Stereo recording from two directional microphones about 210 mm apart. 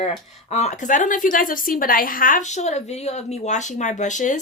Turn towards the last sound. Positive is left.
turn(degrees=35)  # may be behind; listen again after turning